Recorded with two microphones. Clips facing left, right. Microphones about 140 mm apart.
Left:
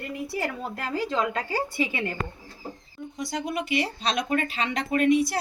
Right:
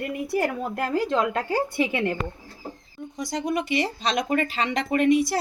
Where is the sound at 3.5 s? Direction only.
15° right (ahead or behind).